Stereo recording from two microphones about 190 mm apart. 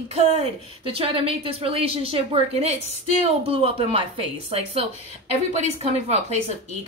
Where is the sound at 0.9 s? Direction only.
30° right (ahead or behind).